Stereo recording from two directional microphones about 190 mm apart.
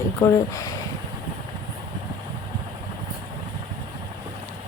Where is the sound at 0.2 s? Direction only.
15° left (ahead or behind).